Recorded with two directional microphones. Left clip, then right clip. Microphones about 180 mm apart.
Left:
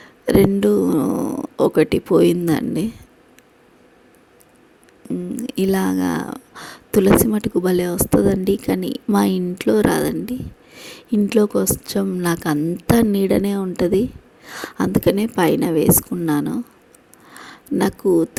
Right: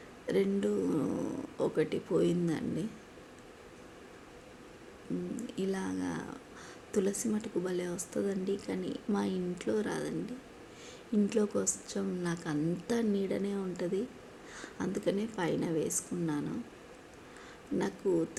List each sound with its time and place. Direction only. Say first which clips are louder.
0.3 s speech: left 16 dB; 60° left (ahead or behind)
5.4 s speech: left 19 dB; 60° left (ahead or behind)
17.3 s a sound: left 13 dB; 60° left (ahead or behind)